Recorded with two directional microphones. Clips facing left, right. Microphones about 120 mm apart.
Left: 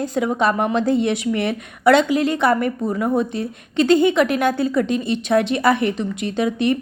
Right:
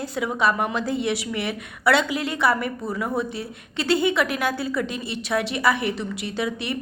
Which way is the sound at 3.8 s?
20° left (ahead or behind).